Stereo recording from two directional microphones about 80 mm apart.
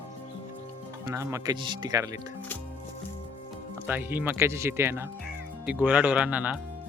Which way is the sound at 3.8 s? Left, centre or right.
Right.